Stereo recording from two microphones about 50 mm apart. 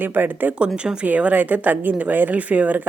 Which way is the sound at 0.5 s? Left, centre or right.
Right.